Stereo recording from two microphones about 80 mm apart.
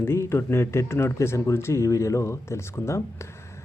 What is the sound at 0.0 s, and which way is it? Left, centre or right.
Speech, left.